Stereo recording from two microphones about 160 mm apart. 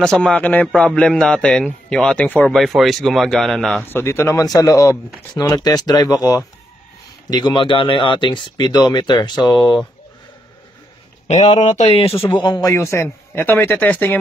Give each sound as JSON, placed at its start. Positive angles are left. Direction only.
{"t": 0.0, "sound": "a man's voice", "side_deg": 5}
{"t": 3.8, "sound": "speech", "side_deg": 15}
{"t": 11.6, "sound": "speech", "side_deg": 45}
{"t": 12.4, "sound": "a man's voice", "side_deg": 25}